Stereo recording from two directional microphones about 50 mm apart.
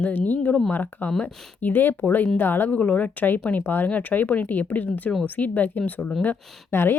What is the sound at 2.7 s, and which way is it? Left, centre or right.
Speech, left.